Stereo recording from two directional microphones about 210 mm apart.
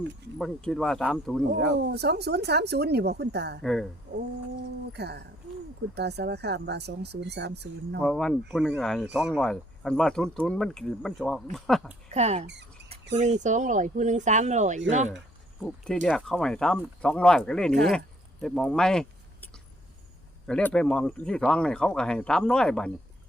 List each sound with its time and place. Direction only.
0.3 s speech: centre (ahead or behind)
1.9 s speech: 50° right (ahead or behind)
3.6 s speech: centre (ahead or behind)
4.1 s speech: 55° right (ahead or behind)
8.0 s speech: centre (ahead or behind)
12.0 s speech: 30° right (ahead or behind)
16.0 s speech: 5° left (ahead or behind)
20.5 s speech: 5° left (ahead or behind)